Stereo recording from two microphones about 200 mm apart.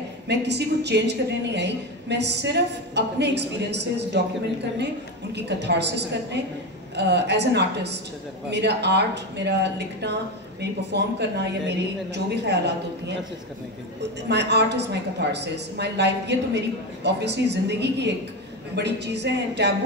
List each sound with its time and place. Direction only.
0.3 s a woman's voice: 60° right (ahead or behind)
5.3 s a woman's voice: 60° right (ahead or behind)
14.3 s a woman's voice: 60° right (ahead or behind)